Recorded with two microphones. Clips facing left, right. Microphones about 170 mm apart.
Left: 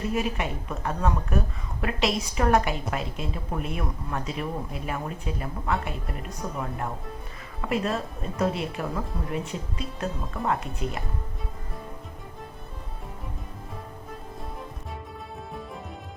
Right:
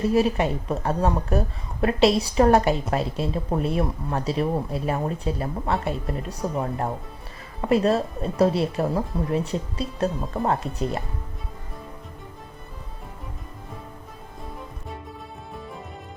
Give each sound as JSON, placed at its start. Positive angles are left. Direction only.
{"t": 0.1, "sound": "speech", "side_deg": -35}